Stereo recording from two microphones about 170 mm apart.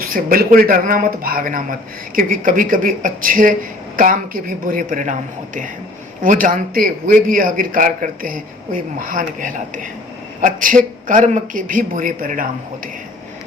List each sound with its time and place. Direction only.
0.1 s a man's voice: 55° right (ahead or behind)
6.2 s a man's voice: 55° right (ahead or behind)